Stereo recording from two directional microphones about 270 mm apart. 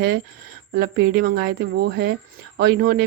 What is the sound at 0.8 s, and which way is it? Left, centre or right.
Speech, right.